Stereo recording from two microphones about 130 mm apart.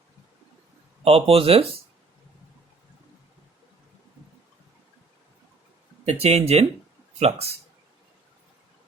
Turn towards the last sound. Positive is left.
turn(degrees=-50)  # may be behind; listen again after turning